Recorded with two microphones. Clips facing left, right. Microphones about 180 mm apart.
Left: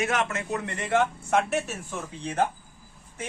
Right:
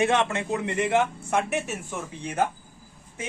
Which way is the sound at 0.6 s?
15° right (ahead or behind).